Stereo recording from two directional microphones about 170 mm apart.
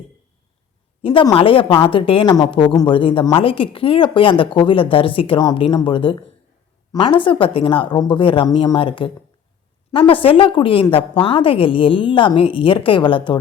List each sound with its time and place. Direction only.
1.0 s a woman's voice: 30° left (ahead or behind)